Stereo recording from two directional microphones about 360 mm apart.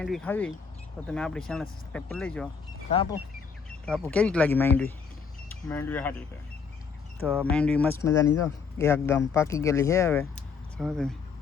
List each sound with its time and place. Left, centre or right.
0.0 s speech: centre
2.9 s speech: centre
3.8 s speech: centre
7.3 s speech: centre